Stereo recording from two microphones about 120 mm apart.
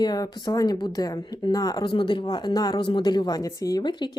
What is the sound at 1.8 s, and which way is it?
Speech, 40° left (ahead or behind).